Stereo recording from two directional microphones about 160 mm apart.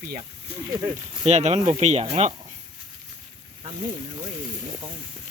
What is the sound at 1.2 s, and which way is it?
Speech, 45° right (ahead or behind).